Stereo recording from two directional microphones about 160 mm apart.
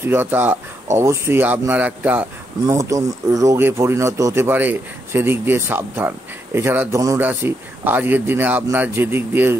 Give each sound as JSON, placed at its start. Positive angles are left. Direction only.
{"t": 0.0, "sound": "speech", "side_deg": -15}